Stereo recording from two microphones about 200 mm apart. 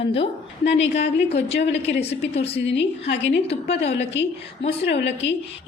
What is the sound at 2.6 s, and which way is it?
A woman's voice, 65° left (ahead or behind).